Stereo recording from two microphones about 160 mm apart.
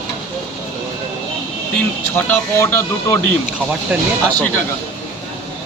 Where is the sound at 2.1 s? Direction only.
10° left (ahead or behind).